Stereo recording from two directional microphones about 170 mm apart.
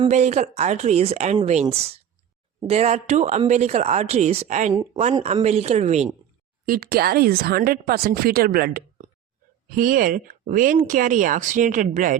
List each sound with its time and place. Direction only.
0.0 s speech: 40° right (ahead or behind)
4.7 s speech: 35° right (ahead or behind)
6.7 s a woman's voice: 60° right (ahead or behind)